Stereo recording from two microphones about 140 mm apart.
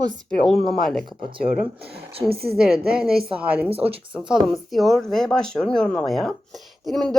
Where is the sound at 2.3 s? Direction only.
90° right.